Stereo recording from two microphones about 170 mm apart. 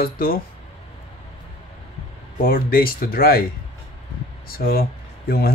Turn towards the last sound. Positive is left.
turn(degrees=60)  # may be behind; listen again after turning